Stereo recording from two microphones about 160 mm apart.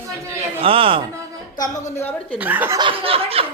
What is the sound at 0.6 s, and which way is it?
Snicker, 35° right (ahead or behind).